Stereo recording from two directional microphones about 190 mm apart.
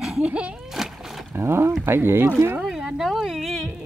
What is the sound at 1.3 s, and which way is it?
Speech, 10° right (ahead or behind).